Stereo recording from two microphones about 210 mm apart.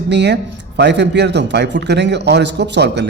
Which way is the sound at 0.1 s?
55° right (ahead or behind).